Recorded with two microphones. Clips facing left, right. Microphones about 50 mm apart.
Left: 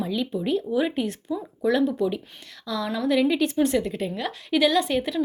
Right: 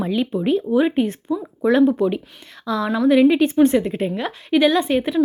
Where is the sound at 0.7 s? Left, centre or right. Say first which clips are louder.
Right 7 dB; right.